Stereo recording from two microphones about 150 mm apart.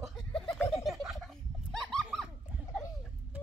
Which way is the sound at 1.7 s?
5° left (ahead or behind).